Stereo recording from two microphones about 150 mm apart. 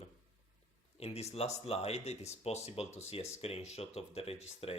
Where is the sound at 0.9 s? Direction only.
45° left (ahead or behind).